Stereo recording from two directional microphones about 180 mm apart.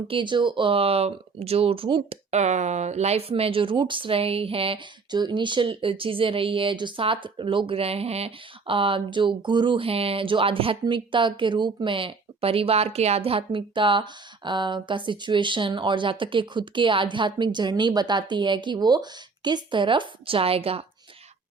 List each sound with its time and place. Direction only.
0.1 s speech: 25° right (ahead or behind)